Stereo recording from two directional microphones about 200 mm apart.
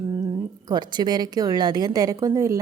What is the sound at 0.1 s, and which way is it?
Speech, 15° right (ahead or behind).